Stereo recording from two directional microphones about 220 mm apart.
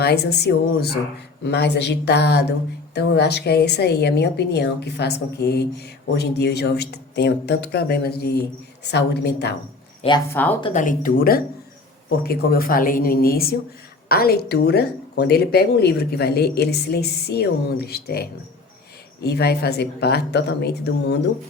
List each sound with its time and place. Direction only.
0.0 s a woman's voice: 45° left (ahead or behind)
10.3 s speech: 10° left (ahead or behind)
10.8 s a woman's voice: 35° left (ahead or behind)